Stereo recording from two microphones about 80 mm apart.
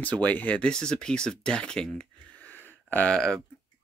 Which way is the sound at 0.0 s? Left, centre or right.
Centre.